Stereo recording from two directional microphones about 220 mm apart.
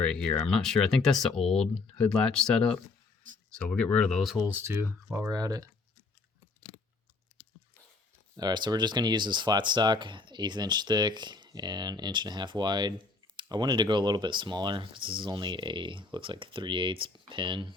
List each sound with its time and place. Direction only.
0.0 s speech: 5° left (ahead or behind); by 5.6 s 15° right (ahead or behind)
8.4 s speech: 20° right (ahead or behind)